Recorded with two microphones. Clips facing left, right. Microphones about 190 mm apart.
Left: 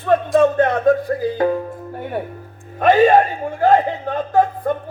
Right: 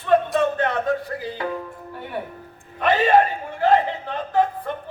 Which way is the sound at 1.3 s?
45° left (ahead or behind).